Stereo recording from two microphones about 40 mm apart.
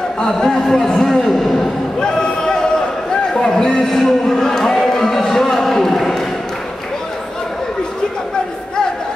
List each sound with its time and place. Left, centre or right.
0.2 s speech: centre
1.2 s a sound: centre
2.0 s basketball bounce: centre
3.4 s speech: centre